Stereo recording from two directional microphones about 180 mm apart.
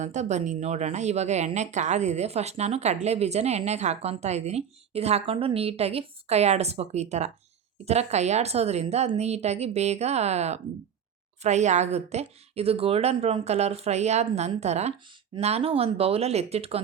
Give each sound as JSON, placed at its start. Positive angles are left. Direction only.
{"t": 0.0, "sound": "a woman's voice", "side_deg": -40}